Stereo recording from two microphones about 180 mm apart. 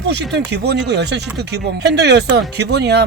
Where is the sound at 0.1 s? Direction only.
70° right (ahead or behind).